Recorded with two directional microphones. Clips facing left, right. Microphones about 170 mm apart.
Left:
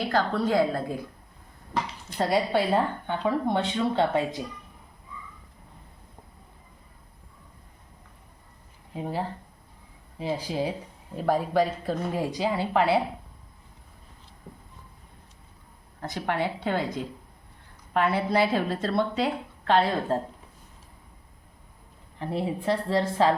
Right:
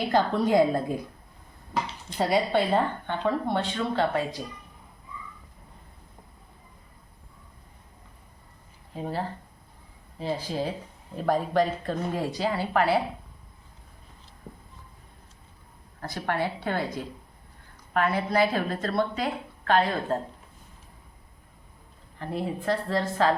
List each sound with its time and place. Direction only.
0.1 s a woman's voice: 15° right (ahead or behind)
2.1 s a woman's voice: centre (ahead or behind); by 4.4 s 20° left (ahead or behind)
8.9 s a woman's voice: 15° left (ahead or behind)
16.0 s a woman's voice: 20° left (ahead or behind)
22.6 s a woman's voice: 25° left (ahead or behind)